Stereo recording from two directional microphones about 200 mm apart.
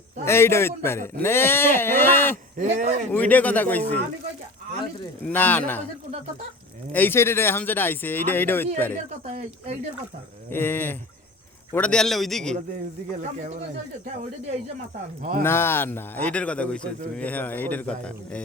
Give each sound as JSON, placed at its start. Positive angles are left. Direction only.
{"t": 0.3, "sound": "speech", "side_deg": 10}
{"t": 2.6, "sound": "speech", "side_deg": -35}
{"t": 3.1, "sound": "speech", "side_deg": 10}
{"t": 5.2, "sound": "speech", "side_deg": 10}
{"t": 6.9, "sound": "speech", "side_deg": 10}
{"t": 9.2, "sound": "speech", "side_deg": -35}
{"t": 10.5, "sound": "a man's voice", "side_deg": 10}
{"t": 13.1, "sound": "speech", "side_deg": -40}
{"t": 15.2, "sound": "speech", "side_deg": -45}
{"t": 15.4, "sound": "speech", "side_deg": 10}